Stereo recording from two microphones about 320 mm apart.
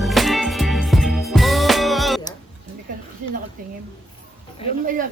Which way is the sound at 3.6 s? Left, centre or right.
Right.